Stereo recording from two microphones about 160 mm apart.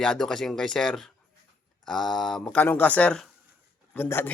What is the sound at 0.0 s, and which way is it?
Speech, 5° left (ahead or behind).